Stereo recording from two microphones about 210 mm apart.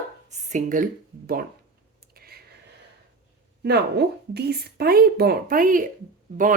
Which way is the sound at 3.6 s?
50° right (ahead or behind).